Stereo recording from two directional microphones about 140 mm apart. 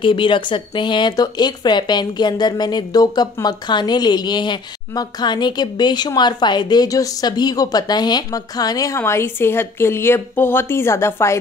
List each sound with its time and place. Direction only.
0.0 s speech: 35° left (ahead or behind); by 11.3 s 20° left (ahead or behind)